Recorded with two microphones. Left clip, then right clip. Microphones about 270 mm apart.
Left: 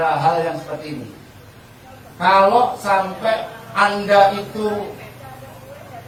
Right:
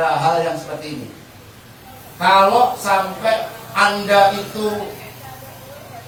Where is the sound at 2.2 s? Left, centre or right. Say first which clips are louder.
Right 1 dB; centre.